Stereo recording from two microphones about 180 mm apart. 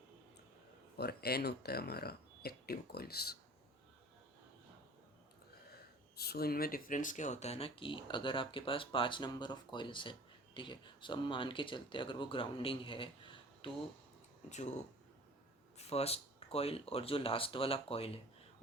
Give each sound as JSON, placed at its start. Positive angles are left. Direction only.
{"t": 0.9, "sound": "speech", "side_deg": 60}
{"t": 5.7, "sound": "speech", "side_deg": 60}
{"t": 14.5, "sound": "speech", "side_deg": 40}
{"t": 15.8, "sound": "speech", "side_deg": 35}